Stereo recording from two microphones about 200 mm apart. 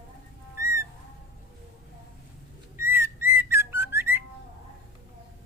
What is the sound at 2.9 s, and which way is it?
Whistling, 10° right (ahead or behind).